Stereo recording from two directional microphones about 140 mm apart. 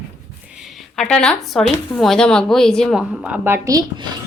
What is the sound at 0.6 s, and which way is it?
Speech, 5° left (ahead or behind).